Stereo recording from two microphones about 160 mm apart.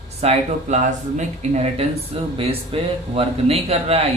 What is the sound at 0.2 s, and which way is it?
Speech, 45° right (ahead or behind).